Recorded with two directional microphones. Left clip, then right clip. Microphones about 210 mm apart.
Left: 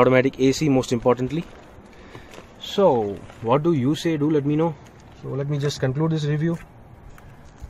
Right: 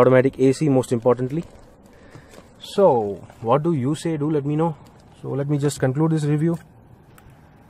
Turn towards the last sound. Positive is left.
turn(degrees=-20)  # may be behind; listen again after turning